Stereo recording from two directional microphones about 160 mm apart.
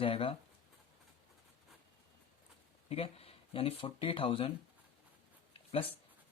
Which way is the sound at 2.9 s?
40° left (ahead or behind).